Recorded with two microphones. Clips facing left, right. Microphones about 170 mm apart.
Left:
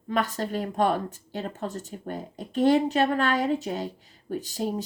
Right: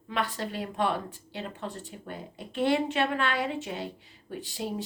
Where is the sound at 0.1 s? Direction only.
45° left (ahead or behind).